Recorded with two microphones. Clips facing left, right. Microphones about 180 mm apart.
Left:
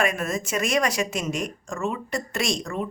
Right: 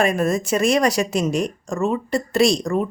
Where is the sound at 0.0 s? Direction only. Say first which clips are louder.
Right 6 dB; 35° right (ahead or behind).